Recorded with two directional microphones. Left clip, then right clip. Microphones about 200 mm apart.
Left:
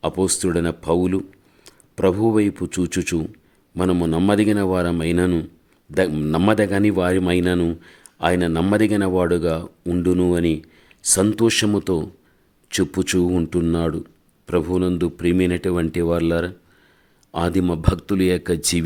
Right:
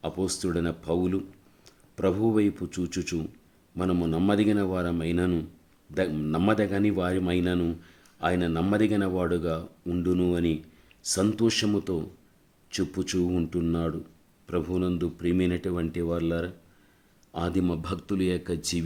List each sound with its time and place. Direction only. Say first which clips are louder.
0.0 s speech: left 9 dB; 35° left (ahead or behind)